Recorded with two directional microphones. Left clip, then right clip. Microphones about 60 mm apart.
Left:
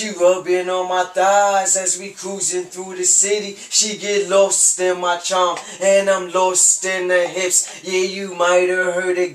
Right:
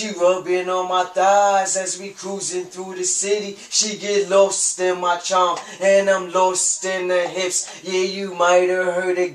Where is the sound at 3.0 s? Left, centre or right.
Centre.